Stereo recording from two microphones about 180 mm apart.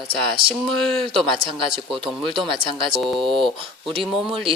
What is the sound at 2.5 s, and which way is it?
Speech, 30° right (ahead or behind).